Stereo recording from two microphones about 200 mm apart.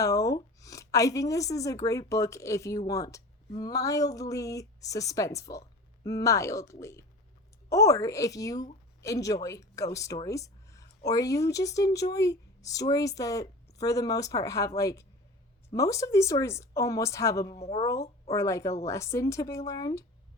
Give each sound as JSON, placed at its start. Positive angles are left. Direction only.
{"t": 0.0, "sound": "speech", "side_deg": 15}
{"t": 17.6, "sound": "speech", "side_deg": 30}
{"t": 18.3, "sound": "speech", "side_deg": 15}